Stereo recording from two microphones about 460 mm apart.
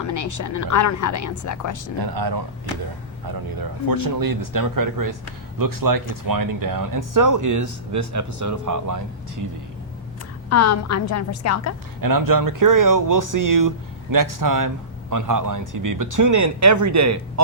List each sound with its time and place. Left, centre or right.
0.0 s speech: left
2.0 s speech: right
3.8 s speech: right
10.5 s speech: left
11.9 s speech: right